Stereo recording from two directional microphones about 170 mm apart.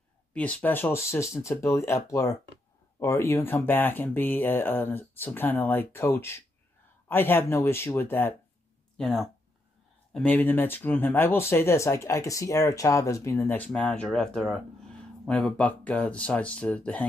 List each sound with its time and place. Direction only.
0.3 s speech: 5° left (ahead or behind)